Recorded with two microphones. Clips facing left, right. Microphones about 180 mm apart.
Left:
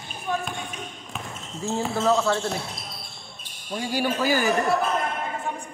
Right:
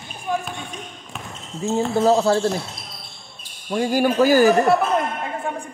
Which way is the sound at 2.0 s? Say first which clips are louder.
Right 5 dB; 35° right (ahead or behind).